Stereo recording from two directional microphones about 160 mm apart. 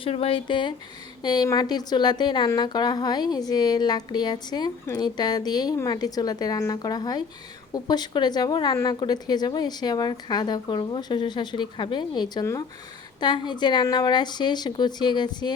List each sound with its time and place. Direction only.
0.0 s a woman's voice: 35° left (ahead or behind)